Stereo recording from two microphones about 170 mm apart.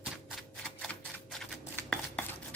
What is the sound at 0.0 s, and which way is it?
Typewriter, centre (ahead or behind).